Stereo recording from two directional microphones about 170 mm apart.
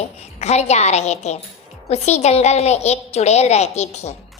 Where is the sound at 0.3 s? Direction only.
40° left (ahead or behind).